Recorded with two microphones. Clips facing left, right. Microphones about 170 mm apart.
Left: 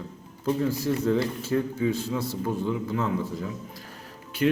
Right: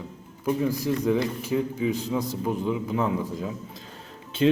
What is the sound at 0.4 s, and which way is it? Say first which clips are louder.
A man's voice: even; 15° right (ahead or behind).